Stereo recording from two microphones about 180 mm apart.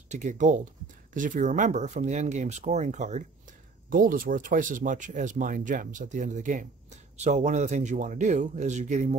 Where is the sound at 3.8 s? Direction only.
50° right (ahead or behind).